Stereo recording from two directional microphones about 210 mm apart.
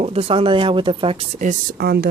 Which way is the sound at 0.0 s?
25° right (ahead or behind).